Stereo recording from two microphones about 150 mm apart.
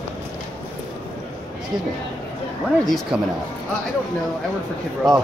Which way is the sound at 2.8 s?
Centre (ahead or behind).